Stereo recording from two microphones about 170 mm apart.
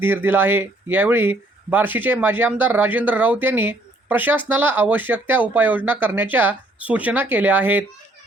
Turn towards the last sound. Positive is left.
turn(degrees=-10)  # may be behind; listen again after turning